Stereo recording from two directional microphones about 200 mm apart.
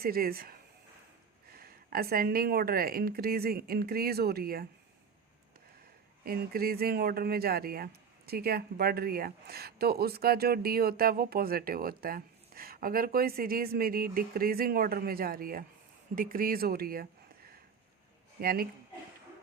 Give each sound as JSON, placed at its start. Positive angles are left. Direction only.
{"t": 0.0, "sound": "speech", "side_deg": -50}
{"t": 6.2, "sound": "speech", "side_deg": -50}
{"t": 18.3, "sound": "speech", "side_deg": -50}